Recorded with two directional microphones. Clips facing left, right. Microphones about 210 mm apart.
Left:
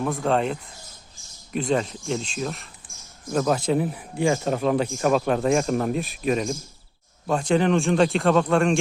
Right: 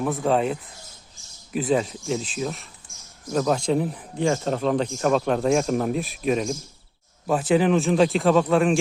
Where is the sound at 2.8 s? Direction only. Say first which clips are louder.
Left 1 dB; 15° left (ahead or behind).